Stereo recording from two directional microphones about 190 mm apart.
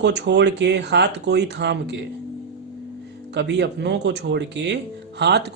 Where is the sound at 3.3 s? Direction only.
65° right (ahead or behind).